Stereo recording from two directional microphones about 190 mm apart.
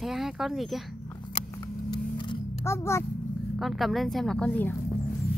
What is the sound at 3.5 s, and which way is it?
Speech, centre (ahead or behind).